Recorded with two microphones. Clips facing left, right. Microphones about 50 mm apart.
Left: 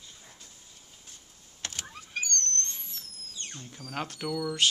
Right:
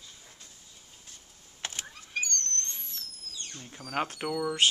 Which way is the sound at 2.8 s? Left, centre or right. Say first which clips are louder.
Right 1 dB; centre.